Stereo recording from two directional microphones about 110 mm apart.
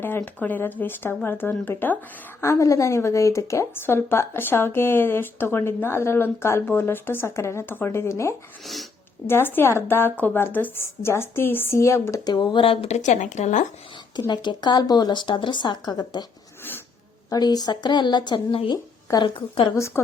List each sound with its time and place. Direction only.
0.2 s a woman's voice: 15° left (ahead or behind)
8.6 s speech: centre (ahead or behind)
9.2 s a woman's voice: 20° left (ahead or behind)
12.2 s speech: 40° left (ahead or behind); by 12.9 s 55° left (ahead or behind)
12.9 s speech: 90° left
14.3 s speech: 40° left (ahead or behind)
17.2 s speech: 35° left (ahead or behind); by 19.7 s 50° left (ahead or behind)
19.7 s a woman's voice: 25° left (ahead or behind)